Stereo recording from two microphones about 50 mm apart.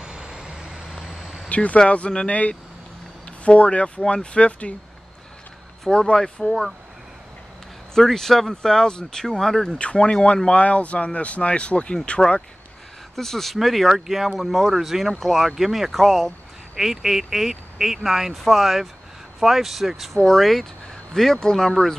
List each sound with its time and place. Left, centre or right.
0.0 s vehicle: centre
0.8 s vehicle: centre
1.5 s speech: left
5.9 s speech: centre
7.9 s speech: centre
9.8 s speech: left
13.1 s speech: centre